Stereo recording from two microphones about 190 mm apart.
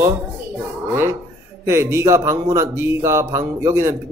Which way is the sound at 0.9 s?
10° right (ahead or behind).